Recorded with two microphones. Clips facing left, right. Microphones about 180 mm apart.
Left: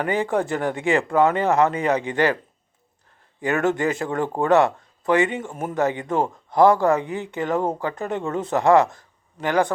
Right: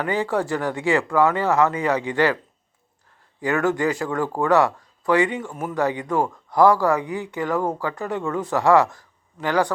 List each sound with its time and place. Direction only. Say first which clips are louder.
0.0 s speech: left 1 dB; 20° left (ahead or behind)
3.4 s speech: even; 25° left (ahead or behind)